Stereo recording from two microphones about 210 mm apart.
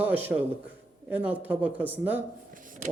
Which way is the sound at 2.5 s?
40° right (ahead or behind).